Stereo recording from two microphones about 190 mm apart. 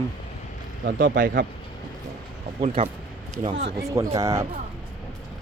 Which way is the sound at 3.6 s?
60° right (ahead or behind).